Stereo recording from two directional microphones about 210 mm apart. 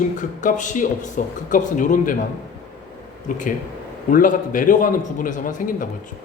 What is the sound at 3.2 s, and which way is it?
A man's voice, 35° left (ahead or behind).